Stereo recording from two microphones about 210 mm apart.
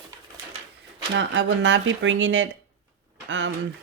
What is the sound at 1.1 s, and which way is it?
Speech, 60° right (ahead or behind).